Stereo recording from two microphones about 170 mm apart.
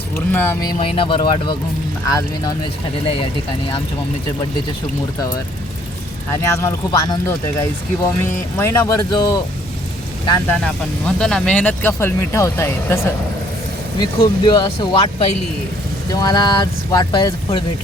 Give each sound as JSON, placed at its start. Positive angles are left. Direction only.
{"t": 0.3, "sound": "a sound", "side_deg": 10}
{"t": 0.8, "sound": "speech", "side_deg": 30}
{"t": 6.6, "sound": "speech", "side_deg": 20}
{"t": 10.4, "sound": "speech", "side_deg": 5}
{"t": 14.0, "sound": "speech", "side_deg": 25}